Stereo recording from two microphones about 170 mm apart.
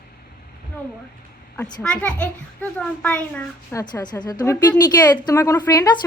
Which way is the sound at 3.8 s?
25° left (ahead or behind).